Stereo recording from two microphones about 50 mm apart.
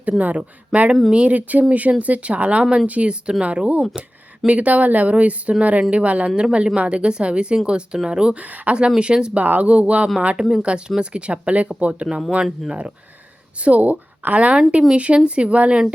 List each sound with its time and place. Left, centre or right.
0.2 s speech: right
8.4 s speech: right
9.0 s speech: centre
9.4 s speech: right
13.6 s speech: right